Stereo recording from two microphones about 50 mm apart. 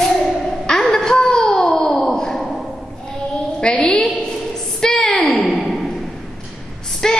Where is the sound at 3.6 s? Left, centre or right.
Centre.